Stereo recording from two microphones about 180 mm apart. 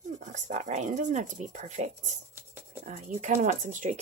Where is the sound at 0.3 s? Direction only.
40° right (ahead or behind).